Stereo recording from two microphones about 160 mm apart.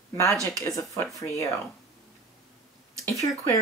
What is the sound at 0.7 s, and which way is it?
Speech, 20° left (ahead or behind).